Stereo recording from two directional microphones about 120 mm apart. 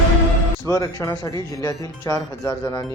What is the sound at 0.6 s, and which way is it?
Speech, 30° left (ahead or behind).